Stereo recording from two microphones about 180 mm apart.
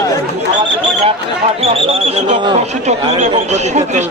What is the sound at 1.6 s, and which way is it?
Speech, 35° right (ahead or behind).